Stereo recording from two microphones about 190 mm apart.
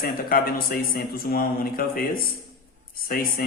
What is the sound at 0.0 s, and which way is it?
Speech, 50° left (ahead or behind).